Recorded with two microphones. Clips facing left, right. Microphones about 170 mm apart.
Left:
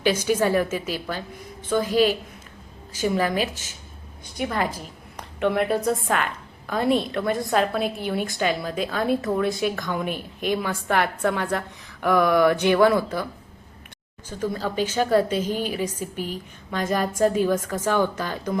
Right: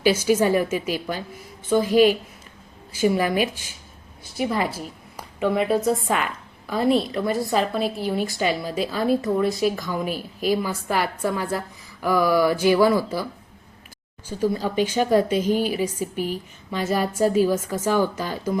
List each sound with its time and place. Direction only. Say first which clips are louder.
0.3 s a woman's voice: right 2 dB; 10° right (ahead or behind)
14.3 s a woman's voice: right 4 dB; 10° right (ahead or behind)